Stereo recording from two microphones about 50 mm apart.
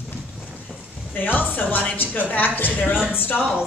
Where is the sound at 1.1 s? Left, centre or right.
Left.